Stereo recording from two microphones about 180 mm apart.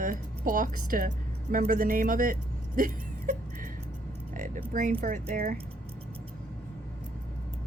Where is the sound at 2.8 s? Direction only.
50° right (ahead or behind).